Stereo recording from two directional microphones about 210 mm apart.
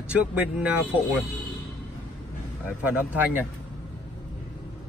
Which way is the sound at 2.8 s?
10° right (ahead or behind).